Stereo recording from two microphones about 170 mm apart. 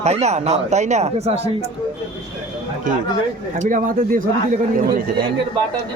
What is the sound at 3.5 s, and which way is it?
A man's voice, 50° right (ahead or behind).